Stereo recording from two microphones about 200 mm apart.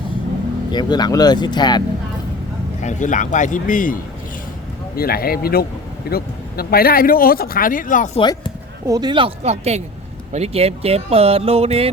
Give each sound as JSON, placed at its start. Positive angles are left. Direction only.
{"t": 0.7, "sound": "speech", "side_deg": 20}
{"t": 2.8, "sound": "a man's voice", "side_deg": 40}
{"t": 4.9, "sound": "speech", "side_deg": 50}
{"t": 8.2, "sound": "speech", "side_deg": 25}
{"t": 8.9, "sound": "speech", "side_deg": -20}